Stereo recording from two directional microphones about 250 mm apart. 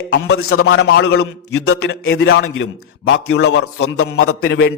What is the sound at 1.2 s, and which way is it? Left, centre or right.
Speech, left.